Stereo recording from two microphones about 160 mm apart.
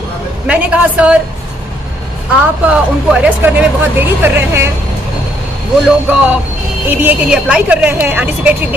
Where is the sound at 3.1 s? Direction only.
10° right (ahead or behind).